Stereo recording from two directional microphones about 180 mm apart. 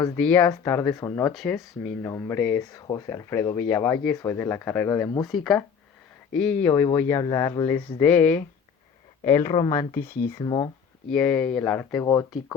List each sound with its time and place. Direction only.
0.2 s speech: 10° left (ahead or behind)
1.3 s speech: centre (ahead or behind); by 5.2 s 15° left (ahead or behind)
5.2 s speech: centre (ahead or behind); by 7.8 s 20° left (ahead or behind)
8.0 s speech: 10° left (ahead or behind)
9.5 s speech: 30° left (ahead or behind)
11.1 s speech: 5° left (ahead or behind)